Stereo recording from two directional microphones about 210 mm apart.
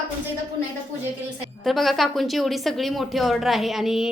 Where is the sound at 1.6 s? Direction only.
Centre (ahead or behind).